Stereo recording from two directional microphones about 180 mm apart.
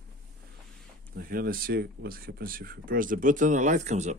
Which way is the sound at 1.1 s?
55° right (ahead or behind).